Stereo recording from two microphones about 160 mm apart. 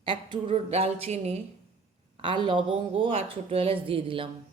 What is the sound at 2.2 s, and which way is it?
A woman's voice, 30° right (ahead or behind).